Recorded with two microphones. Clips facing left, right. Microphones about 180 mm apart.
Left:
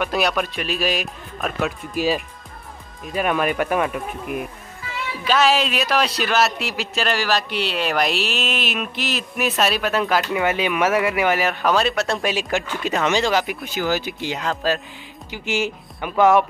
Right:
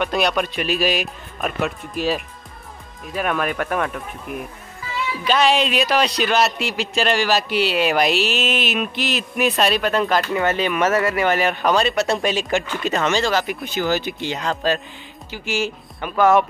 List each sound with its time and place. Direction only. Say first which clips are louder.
0.0 s a man's voice: right 1 dB; 5° left (ahead or behind)
15.3 s speech: even; 20° left (ahead or behind)